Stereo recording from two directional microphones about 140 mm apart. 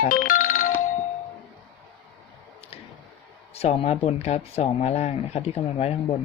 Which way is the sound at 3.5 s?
45° left (ahead or behind).